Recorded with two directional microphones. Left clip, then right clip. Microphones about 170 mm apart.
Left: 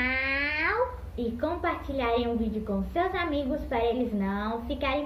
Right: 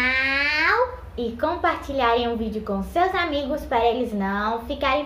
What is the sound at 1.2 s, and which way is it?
A woman's voice, 5° right (ahead or behind).